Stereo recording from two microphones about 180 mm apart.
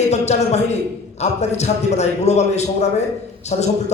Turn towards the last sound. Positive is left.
turn(degrees=40)  # may be behind; listen again after turning